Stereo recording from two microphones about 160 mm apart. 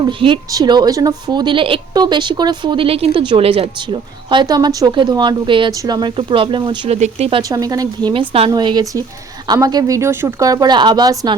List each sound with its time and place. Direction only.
0.0 s a woman's voice: 30° right (ahead or behind)
7.4 s a woman's voice: 25° right (ahead or behind)